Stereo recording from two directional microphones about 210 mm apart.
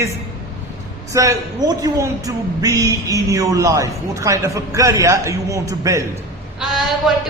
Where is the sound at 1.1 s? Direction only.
15° right (ahead or behind).